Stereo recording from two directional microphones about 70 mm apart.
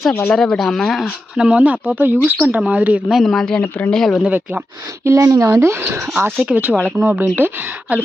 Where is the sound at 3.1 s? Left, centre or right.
Centre.